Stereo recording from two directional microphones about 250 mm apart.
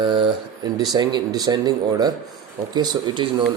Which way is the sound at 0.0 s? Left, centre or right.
Centre.